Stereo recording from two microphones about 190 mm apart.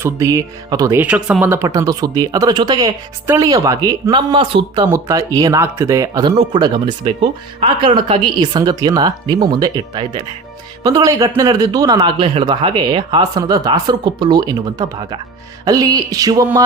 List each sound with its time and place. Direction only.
0.0 s speech: 15° right (ahead or behind)